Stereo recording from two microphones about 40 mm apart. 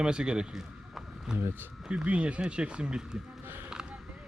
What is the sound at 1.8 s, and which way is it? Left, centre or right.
Speech, right.